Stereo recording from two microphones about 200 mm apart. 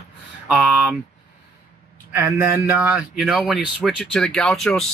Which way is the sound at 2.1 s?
10° right (ahead or behind).